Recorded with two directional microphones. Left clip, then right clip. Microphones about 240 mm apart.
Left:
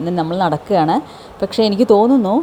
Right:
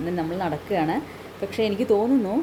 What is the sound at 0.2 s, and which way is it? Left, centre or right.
Speech, left.